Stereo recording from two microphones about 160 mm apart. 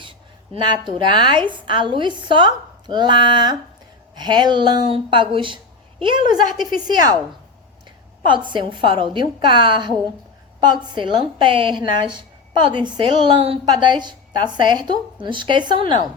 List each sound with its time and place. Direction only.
0.5 s a woman's voice: 30° right (ahead or behind)
8.3 s a woman's voice: 30° right (ahead or behind)